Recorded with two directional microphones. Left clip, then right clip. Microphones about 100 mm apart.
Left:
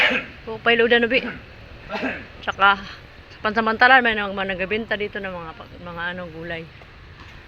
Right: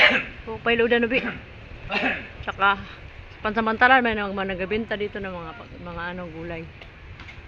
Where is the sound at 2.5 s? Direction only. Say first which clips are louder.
Left 4 dB; 5° left (ahead or behind).